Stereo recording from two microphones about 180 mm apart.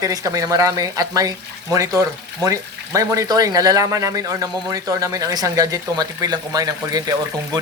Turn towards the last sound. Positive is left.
turn(degrees=-20)  # may be behind; listen again after turning